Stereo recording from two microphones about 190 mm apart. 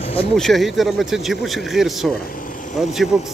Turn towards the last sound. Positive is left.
turn(degrees=0)  # may be behind; listen again after turning